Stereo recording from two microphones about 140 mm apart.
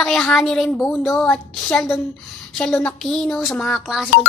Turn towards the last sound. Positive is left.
turn(degrees=0)  # may be behind; listen again after turning